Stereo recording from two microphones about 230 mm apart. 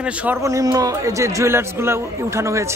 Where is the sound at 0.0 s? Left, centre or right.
Centre.